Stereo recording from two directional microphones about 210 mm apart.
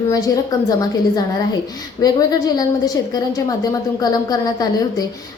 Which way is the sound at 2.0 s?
20° left (ahead or behind).